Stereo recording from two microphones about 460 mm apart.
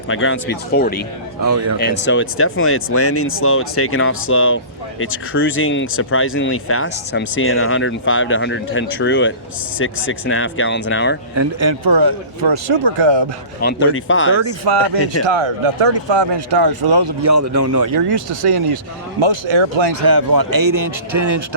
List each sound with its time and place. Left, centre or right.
0.1 s speech: left
1.4 s speech: right
1.8 s speech: left
11.9 s speech: right
13.6 s speech: left
14.7 s speech: right
15.3 s speech: right
16.5 s speech: right
17.2 s speech: right
17.9 s speech: right
19.2 s speech: right
20.0 s speech: right